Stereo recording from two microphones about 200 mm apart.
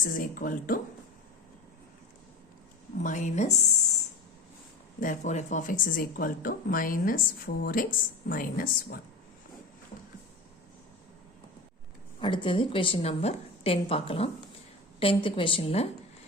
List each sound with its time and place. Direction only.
0.0 s speech: 40° left (ahead or behind)
3.0 s a woman's voice: 40° left (ahead or behind)
4.9 s speech: 40° left (ahead or behind)
12.2 s a woman's voice: 25° left (ahead or behind)